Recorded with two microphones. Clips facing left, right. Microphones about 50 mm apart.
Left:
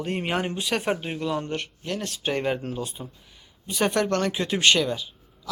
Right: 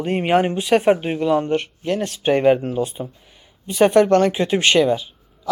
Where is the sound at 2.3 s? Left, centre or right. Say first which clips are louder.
Right 11 dB; centre.